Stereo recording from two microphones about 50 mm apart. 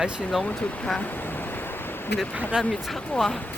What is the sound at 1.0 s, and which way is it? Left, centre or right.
Waves, left.